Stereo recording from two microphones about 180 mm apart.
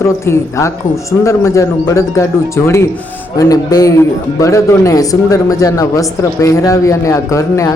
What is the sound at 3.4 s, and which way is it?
A man's voice, 20° left (ahead or behind).